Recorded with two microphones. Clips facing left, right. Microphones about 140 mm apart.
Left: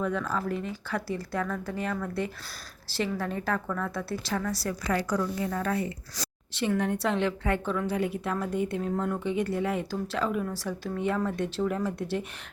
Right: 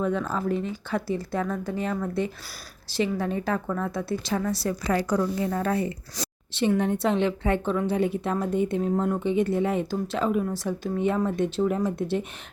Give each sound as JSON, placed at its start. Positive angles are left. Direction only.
{"t": 0.0, "sound": "a woman's voice", "side_deg": -25}